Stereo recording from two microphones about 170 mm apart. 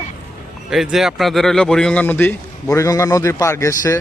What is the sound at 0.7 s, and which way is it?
Speech, centre (ahead or behind).